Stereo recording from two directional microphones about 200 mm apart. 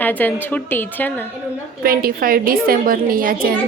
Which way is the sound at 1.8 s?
45° right (ahead or behind).